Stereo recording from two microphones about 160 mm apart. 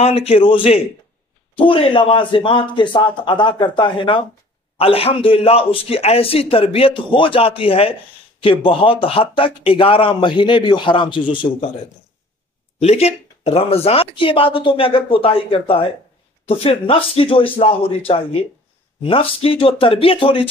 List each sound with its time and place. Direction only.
0.0 s a man's voice: 40° left (ahead or behind)
12.8 s a man's voice: 40° left (ahead or behind)